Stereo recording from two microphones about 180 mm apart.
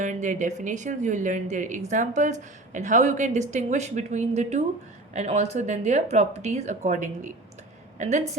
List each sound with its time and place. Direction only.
0.0 s a woman's voice: 45° right (ahead or behind)